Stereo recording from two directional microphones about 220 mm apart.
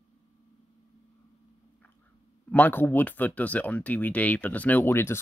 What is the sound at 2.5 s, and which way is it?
Speech, 10° left (ahead or behind).